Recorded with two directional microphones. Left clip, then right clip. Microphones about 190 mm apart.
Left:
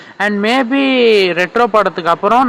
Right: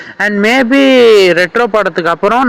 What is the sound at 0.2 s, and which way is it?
A man's voice, 20° right (ahead or behind).